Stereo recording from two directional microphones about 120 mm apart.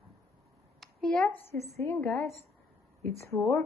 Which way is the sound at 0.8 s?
5° left (ahead or behind).